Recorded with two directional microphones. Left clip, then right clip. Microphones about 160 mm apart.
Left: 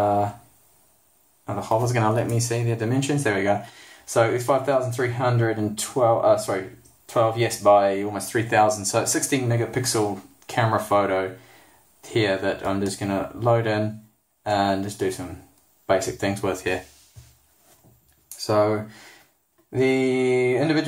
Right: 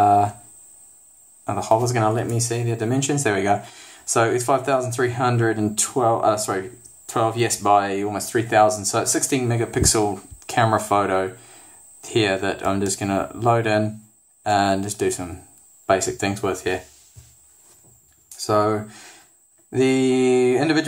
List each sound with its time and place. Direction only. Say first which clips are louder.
0.0 s a sound: right 5 dB; 35° right (ahead or behind)
1.4 s speech: right 5 dB; 35° right (ahead or behind)
1.8 s speech: right 1 dB; 20° right (ahead or behind); by 8.2 s 40° right (ahead or behind)
8.2 s speech: right 3 dB; 20° right (ahead or behind)
18.4 s speech: right 1 dB; 20° right (ahead or behind)
19.7 s speech: right 2 dB; 35° right (ahead or behind)